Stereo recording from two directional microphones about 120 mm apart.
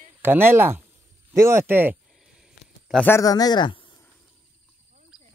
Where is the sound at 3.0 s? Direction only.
25° left (ahead or behind).